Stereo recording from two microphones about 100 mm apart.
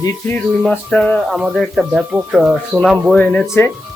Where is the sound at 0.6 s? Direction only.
5° left (ahead or behind).